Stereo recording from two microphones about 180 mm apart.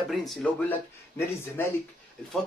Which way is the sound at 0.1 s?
Centre (ahead or behind).